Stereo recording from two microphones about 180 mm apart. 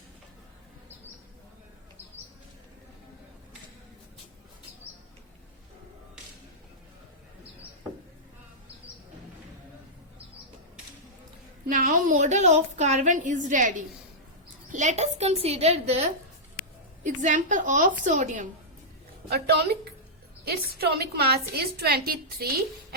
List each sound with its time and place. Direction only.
11.7 s a woman's voice: 50° right (ahead or behind)
19.3 s a woman's voice: 65° right (ahead or behind)